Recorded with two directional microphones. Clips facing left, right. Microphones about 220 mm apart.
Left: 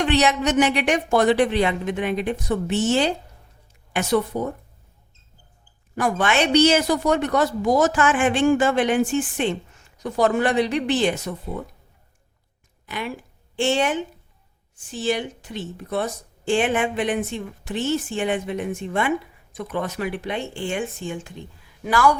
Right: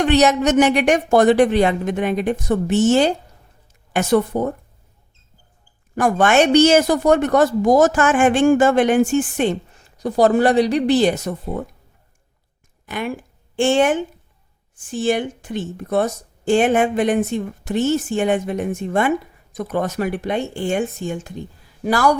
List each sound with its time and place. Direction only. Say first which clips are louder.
0.0 s speech: right 5 dB; 45° right (ahead or behind)
6.0 s speech: right 6 dB; 45° right (ahead or behind)
12.8 s speech: right 5 dB; 50° right (ahead or behind)